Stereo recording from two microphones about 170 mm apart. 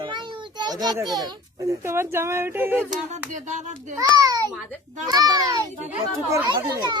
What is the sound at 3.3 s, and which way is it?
Speech, 45° right (ahead or behind).